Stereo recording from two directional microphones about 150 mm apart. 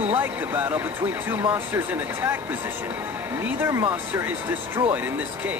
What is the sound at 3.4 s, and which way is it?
Speech, 15° right (ahead or behind).